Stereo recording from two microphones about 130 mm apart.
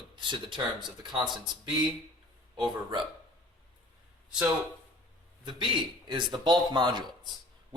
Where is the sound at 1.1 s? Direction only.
35° right (ahead or behind).